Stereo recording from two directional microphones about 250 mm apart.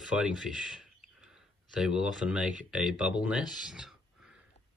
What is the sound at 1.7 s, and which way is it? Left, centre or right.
Speech, centre.